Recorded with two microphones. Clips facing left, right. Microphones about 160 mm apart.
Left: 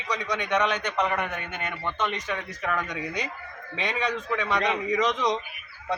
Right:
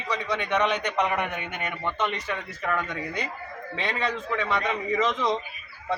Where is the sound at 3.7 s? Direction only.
15° left (ahead or behind).